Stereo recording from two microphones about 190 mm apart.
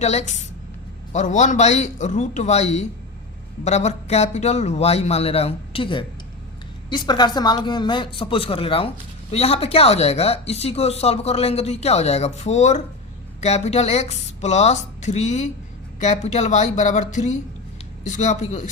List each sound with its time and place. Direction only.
0.0 s speech: 35° left (ahead or behind)